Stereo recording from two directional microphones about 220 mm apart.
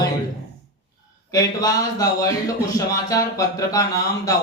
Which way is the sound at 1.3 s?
15° left (ahead or behind).